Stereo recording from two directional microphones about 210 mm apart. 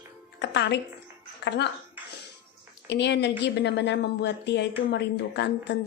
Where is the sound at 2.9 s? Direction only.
55° left (ahead or behind).